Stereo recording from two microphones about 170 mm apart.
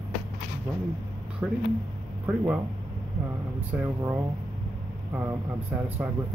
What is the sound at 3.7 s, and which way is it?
Speech, 15° right (ahead or behind).